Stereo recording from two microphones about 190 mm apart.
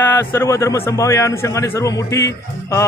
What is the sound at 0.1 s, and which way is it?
A man's voice, 15° left (ahead or behind).